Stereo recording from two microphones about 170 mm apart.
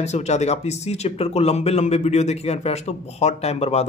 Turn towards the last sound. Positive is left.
turn(degrees=40)  # may be behind; listen again after turning